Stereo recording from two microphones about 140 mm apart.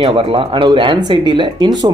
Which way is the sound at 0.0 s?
40° right (ahead or behind).